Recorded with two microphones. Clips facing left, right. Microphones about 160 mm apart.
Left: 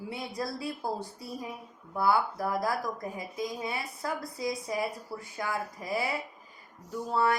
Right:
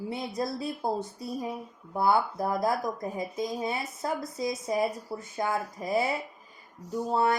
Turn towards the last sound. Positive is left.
turn(degrees=-25)  # may be behind; listen again after turning